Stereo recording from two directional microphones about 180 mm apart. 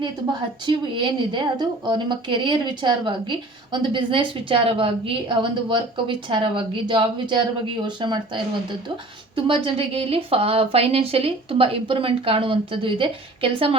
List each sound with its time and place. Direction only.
1.3 s a woman's voice: 25° right (ahead or behind)
9.3 s speech: 30° right (ahead or behind)